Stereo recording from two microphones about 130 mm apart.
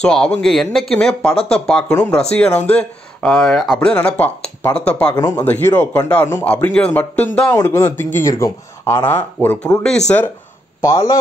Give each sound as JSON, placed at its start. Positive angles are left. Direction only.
{"t": 0.0, "sound": "speech", "side_deg": 5}
{"t": 1.3, "sound": "speech", "side_deg": 50}
{"t": 1.7, "sound": "speech", "side_deg": 5}
{"t": 2.4, "sound": "speech", "side_deg": 55}
{"t": 2.7, "sound": "speech", "side_deg": 10}
{"t": 5.1, "sound": "a man's voice", "side_deg": 30}
{"t": 5.4, "sound": "speech", "side_deg": 15}
{"t": 10.8, "sound": "a man's voice", "side_deg": 25}